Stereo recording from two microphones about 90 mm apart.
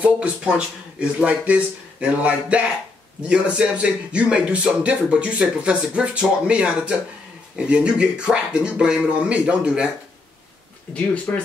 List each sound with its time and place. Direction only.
0.0 s a man's voice: 15° right (ahead or behind)
11.3 s speech: 15° left (ahead or behind)